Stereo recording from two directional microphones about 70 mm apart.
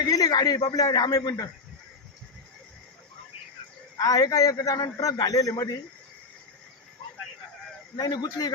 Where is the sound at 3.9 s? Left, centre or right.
Left.